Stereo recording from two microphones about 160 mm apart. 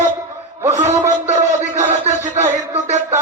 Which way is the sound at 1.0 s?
45° right (ahead or behind).